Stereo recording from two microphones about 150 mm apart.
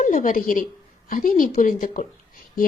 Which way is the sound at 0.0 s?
60° left (ahead or behind).